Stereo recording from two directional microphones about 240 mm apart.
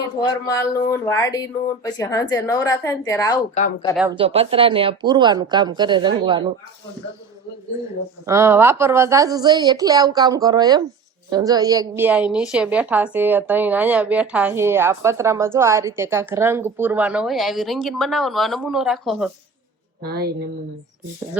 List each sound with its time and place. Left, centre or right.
0.4 s speech: centre
4.1 s speech: right
8.3 s a woman's voice: centre
20.1 s a woman's voice: right